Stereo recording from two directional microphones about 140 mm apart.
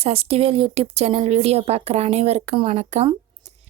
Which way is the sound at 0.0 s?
45° right (ahead or behind).